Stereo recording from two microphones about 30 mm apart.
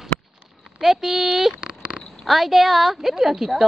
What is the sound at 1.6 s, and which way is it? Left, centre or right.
Sniff, right.